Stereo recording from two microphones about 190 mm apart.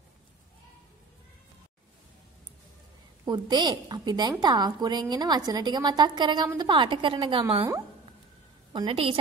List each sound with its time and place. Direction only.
3.3 s a woman's voice: 20° right (ahead or behind)